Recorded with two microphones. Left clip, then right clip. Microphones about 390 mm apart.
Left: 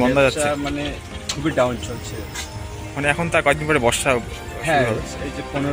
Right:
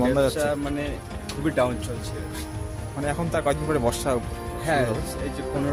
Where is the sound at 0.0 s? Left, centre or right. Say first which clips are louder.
Left 5 dB; right.